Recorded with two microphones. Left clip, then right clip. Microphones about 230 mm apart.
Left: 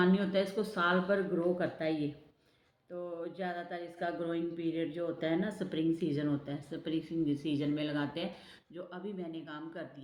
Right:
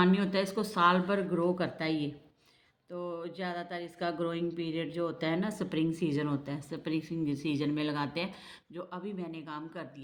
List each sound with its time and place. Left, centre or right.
0.0 s speech: right